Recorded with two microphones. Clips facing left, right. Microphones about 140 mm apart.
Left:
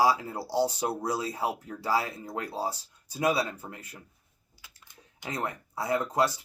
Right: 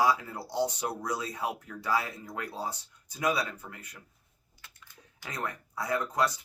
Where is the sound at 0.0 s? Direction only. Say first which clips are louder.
Left 2 dB; 30° left (ahead or behind).